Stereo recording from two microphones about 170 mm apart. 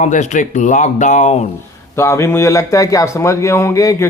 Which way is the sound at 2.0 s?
15° left (ahead or behind).